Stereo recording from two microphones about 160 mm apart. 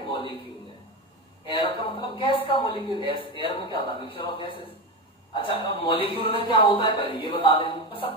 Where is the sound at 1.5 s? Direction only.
30° left (ahead or behind).